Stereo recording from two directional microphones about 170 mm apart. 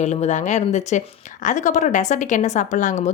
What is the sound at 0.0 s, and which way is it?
Speech, 40° left (ahead or behind).